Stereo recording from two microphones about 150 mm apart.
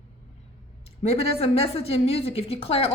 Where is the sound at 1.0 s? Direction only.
40° left (ahead or behind).